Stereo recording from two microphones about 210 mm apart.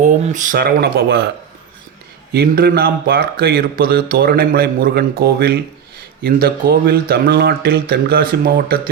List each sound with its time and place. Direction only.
0.0 s speech: 35° right (ahead or behind)
2.3 s speech: 45° right (ahead or behind)